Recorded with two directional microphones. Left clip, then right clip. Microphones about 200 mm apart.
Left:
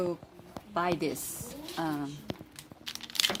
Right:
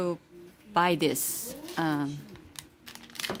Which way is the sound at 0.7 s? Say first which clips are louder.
Right 6 dB; 55° right (ahead or behind).